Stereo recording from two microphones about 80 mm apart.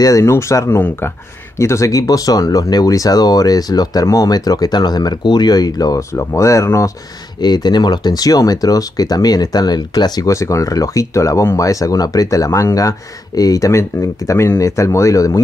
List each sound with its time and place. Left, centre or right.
0.0 s speech: left
6.1 s speech: left
7.3 s speech: left
10.3 s speech: left